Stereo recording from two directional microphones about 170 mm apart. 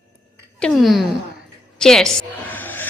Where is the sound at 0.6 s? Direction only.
Centre (ahead or behind).